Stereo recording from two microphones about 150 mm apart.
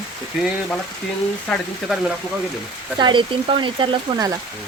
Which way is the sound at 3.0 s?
35° right (ahead or behind).